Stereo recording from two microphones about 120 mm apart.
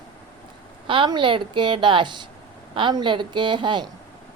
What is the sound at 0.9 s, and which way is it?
A woman's voice, 45° right (ahead or behind).